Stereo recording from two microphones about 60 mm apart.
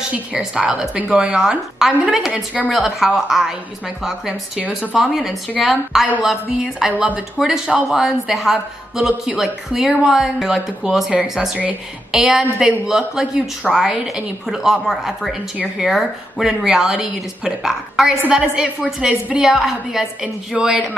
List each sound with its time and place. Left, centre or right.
0.6 s speech: centre
4.9 s a woman's voice: centre